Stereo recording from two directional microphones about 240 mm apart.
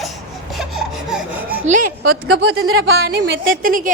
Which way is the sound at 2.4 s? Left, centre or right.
Right.